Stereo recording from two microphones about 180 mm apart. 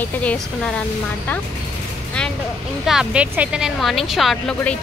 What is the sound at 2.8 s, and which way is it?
A woman's voice, 5° right (ahead or behind).